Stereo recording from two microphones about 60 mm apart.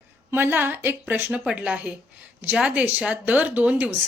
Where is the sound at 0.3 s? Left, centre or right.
Right.